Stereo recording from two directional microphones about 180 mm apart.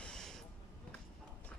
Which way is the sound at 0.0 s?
5° left (ahead or behind).